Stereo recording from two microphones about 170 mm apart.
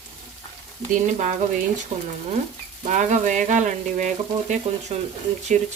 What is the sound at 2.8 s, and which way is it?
Frying, 45° right (ahead or behind).